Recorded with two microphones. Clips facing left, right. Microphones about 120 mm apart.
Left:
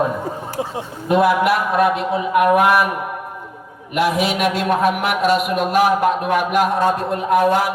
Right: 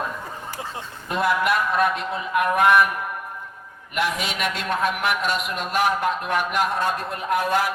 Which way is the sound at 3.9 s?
10° left (ahead or behind).